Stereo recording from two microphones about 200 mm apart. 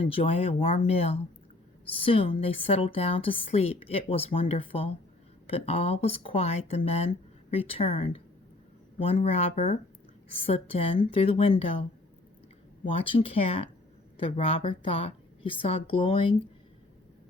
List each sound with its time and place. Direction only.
0.0 s a woman's voice: 30° left (ahead or behind)
12.9 s a woman's voice: 30° left (ahead or behind)